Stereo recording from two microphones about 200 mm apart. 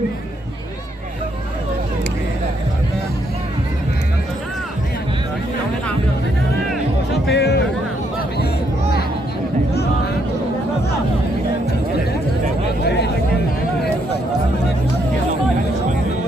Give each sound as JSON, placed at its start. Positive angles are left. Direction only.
{"t": 7.1, "sound": "music", "side_deg": 55}